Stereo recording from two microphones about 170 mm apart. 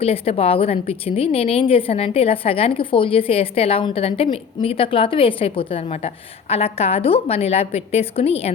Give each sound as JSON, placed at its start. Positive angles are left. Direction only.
{"t": 0.0, "sound": "a woman's voice", "side_deg": 35}